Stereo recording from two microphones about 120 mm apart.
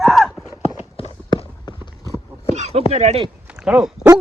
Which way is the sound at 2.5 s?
65° right (ahead or behind).